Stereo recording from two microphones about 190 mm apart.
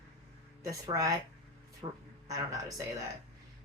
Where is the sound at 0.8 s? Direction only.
20° right (ahead or behind).